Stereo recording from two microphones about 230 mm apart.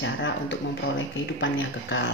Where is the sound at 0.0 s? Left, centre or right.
Left.